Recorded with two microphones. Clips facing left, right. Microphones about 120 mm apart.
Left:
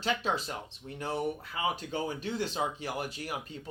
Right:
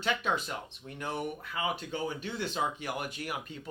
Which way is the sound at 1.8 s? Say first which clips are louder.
Left 1 dB; 40° left (ahead or behind).